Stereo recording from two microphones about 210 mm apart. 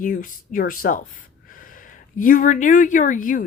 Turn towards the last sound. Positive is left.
turn(degrees=40)  # may be behind; listen again after turning